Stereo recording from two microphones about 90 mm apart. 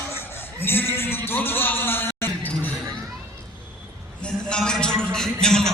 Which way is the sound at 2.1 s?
25° left (ahead or behind).